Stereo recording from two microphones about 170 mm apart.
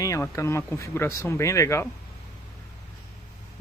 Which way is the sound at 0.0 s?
15° left (ahead or behind).